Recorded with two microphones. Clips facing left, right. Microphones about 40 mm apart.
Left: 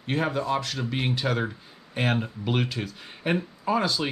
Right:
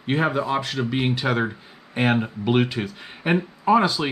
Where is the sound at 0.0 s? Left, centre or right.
Centre.